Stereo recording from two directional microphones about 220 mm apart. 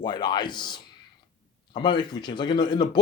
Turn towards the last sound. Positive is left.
turn(degrees=20)  # may be behind; listen again after turning